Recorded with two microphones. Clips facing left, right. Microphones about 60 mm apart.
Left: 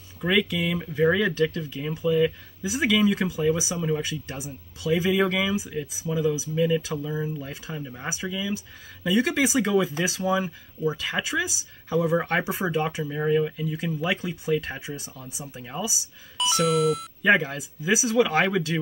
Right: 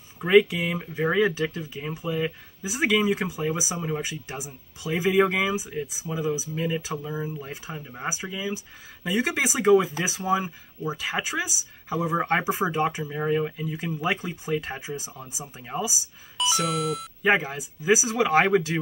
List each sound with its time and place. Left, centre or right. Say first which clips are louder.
0.2 s speech: right 5 dB; right
12.7 s speech: right 1 dB; right
13.0 s speech: left 2 dB; centre
13.7 s speech: right 1 dB; right
16.3 s speech: left 3 dB; centre
17.2 s speech: left 1 dB; centre